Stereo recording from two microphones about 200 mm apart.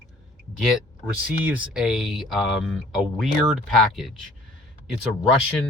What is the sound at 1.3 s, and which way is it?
Speech, 10° right (ahead or behind).